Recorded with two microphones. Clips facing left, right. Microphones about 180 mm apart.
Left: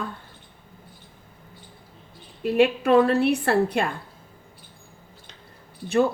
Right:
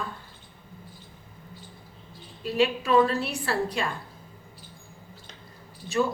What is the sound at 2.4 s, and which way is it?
A woman's voice, 60° left (ahead or behind).